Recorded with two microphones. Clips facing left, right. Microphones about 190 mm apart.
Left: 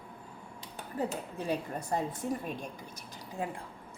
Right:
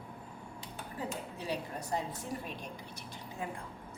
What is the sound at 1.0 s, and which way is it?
Speech, 50° left (ahead or behind).